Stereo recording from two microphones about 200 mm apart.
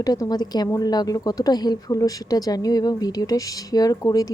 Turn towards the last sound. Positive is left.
turn(degrees=15)  # may be behind; listen again after turning